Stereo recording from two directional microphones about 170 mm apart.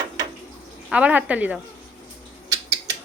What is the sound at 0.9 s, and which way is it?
Speech, 5° right (ahead or behind).